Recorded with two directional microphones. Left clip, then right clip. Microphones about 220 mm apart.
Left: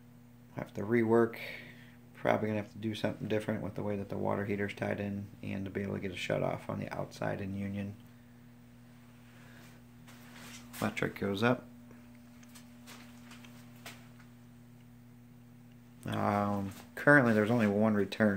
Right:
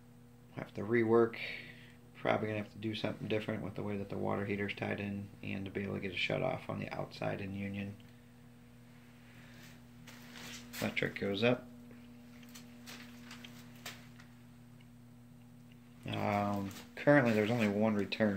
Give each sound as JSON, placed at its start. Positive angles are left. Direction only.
{"t": 0.6, "sound": "speech", "side_deg": 30}
{"t": 10.8, "sound": "speech", "side_deg": 25}
{"t": 16.1, "sound": "speech", "side_deg": 20}